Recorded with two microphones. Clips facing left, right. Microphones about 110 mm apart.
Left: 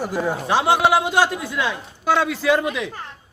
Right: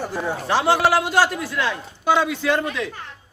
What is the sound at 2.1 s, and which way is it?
Speech, centre (ahead or behind).